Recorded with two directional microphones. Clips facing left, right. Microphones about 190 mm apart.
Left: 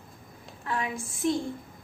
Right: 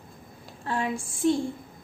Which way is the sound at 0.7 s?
30° right (ahead or behind).